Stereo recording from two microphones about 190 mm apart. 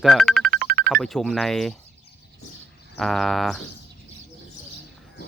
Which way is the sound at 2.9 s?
Centre (ahead or behind).